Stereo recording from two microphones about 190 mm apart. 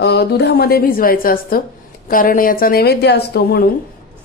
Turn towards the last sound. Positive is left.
turn(degrees=55)  # may be behind; listen again after turning